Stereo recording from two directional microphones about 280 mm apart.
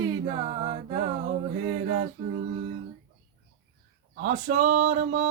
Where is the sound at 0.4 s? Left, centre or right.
Right.